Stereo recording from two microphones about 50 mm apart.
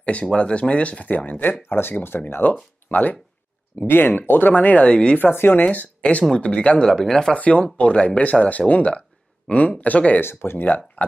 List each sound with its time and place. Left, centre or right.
0.0 s speech: left
3.8 s speech: left; by 5.2 s centre
5.2 s speech: left
5.6 s speech: left
6.9 s speech: centre
7.3 s speech: left
10.2 s speech: left
11.0 s a sound: left